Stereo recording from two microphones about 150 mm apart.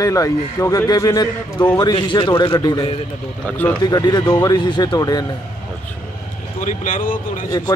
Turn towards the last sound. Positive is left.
turn(degrees=65)  # may be behind; listen again after turning